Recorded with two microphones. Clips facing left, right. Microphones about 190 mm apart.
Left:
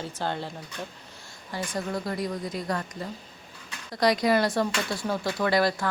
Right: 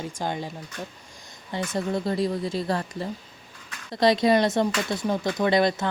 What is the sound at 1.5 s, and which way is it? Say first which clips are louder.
Speech: right 4 dB; 25° right (ahead or behind).